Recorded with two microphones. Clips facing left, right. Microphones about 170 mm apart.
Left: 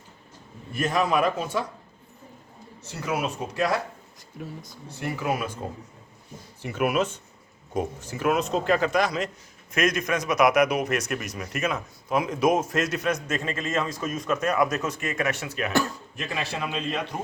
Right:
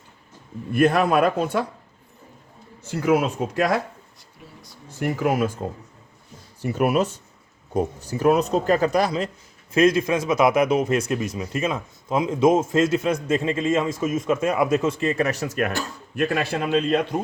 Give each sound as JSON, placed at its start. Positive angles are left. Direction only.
{"t": 0.7, "sound": "a man's voice", "side_deg": -60}
{"t": 2.9, "sound": "a man's voice", "side_deg": -55}
{"t": 6.6, "sound": "a man's voice", "side_deg": -40}
{"t": 16.1, "sound": "a man's voice", "side_deg": -60}